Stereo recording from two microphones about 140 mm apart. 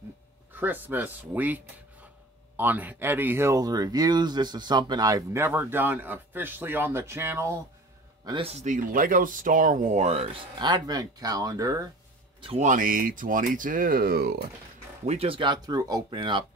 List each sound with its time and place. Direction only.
0.6 s speech: 15° right (ahead or behind)
8.3 s speech: 45° right (ahead or behind); by 11.8 s 25° right (ahead or behind)
12.5 s speech: 70° right (ahead or behind); by 14.2 s 90° right
15.0 s speech: 45° right (ahead or behind)